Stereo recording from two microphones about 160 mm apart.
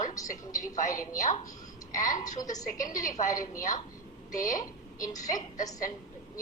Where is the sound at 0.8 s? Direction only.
55° left (ahead or behind).